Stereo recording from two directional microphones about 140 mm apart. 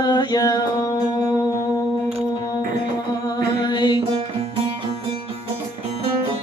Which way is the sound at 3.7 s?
30° left (ahead or behind).